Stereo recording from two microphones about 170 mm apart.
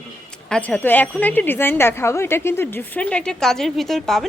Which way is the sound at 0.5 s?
5° left (ahead or behind).